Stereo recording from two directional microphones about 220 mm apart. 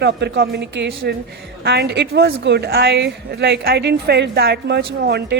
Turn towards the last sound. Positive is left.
turn(degrees=-45)  # may be behind; listen again after turning